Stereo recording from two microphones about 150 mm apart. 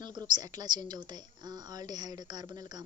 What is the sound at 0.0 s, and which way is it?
A woman's voice, 30° right (ahead or behind).